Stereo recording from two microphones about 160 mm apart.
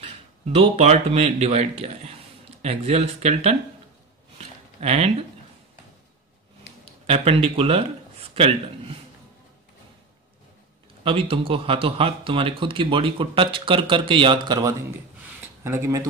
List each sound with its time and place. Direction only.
0.6 s a man's voice: 40° right (ahead or behind)
4.7 s a man's voice: 40° right (ahead or behind)
7.1 s a man's voice: 40° right (ahead or behind)
11.1 s a man's voice: 35° right (ahead or behind)
15.2 s a sound: 15° right (ahead or behind)